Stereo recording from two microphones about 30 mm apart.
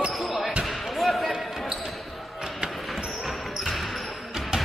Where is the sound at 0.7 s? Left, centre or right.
Centre.